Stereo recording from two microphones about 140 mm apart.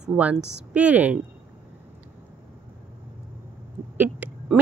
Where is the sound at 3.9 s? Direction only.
15° right (ahead or behind).